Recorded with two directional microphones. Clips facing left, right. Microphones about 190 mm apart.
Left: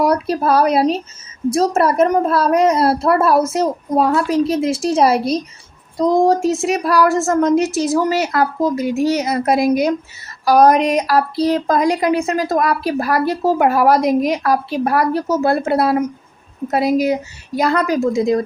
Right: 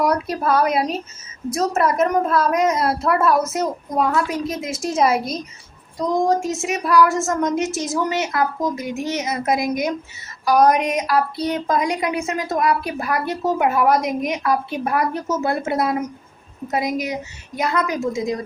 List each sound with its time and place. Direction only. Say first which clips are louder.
0.0 s a woman's voice: left 4 dB; 30° left (ahead or behind)